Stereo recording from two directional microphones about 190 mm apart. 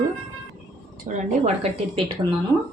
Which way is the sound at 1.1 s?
40° right (ahead or behind).